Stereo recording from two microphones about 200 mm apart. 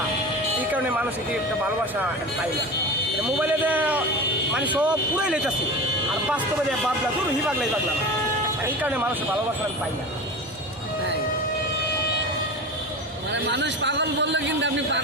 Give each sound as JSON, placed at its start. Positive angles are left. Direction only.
{"t": 0.7, "sound": "speech", "side_deg": -10}
{"t": 3.3, "sound": "speech", "side_deg": -10}
{"t": 13.3, "sound": "a man's voice", "side_deg": -60}